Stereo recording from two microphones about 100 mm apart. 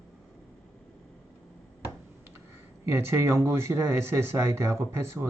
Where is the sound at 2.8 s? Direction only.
25° right (ahead or behind).